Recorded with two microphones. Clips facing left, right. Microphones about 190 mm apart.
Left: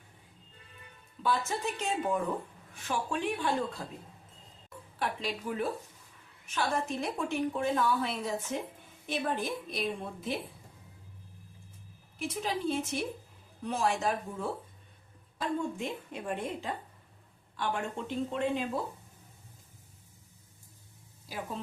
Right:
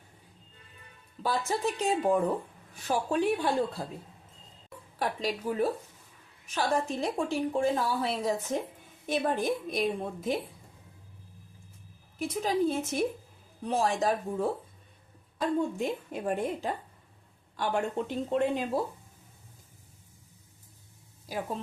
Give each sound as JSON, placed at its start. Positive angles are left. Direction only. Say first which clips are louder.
{"t": 1.2, "sound": "a woman's voice", "louder": "right 2 dB", "side_deg": -35}
{"t": 4.9, "sound": "a woman's voice", "louder": "right 3 dB", "side_deg": -40}
{"t": 9.0, "sound": "a woman's voice", "louder": "right 5 dB", "side_deg": -45}
{"t": 12.3, "sound": "a woman's voice", "louder": "right 5 dB", "side_deg": -40}